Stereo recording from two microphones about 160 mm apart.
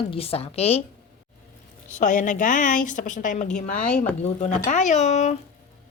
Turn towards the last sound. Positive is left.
turn(degrees=45)  # may be behind; listen again after turning